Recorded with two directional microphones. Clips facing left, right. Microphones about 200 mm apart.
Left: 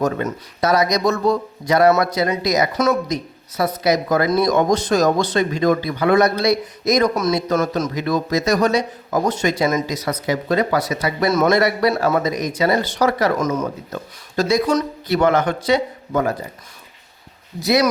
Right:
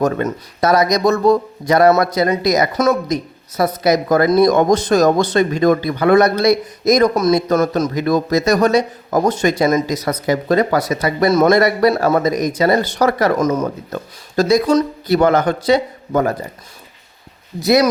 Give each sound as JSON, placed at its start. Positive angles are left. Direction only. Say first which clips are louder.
{"t": 0.0, "sound": "speech", "louder": "right 3 dB", "side_deg": -45}
{"t": 17.6, "sound": "speech", "louder": "right 4 dB", "side_deg": -50}